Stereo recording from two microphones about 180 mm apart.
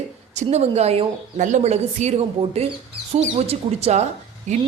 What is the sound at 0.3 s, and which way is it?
A woman's voice, 35° right (ahead or behind).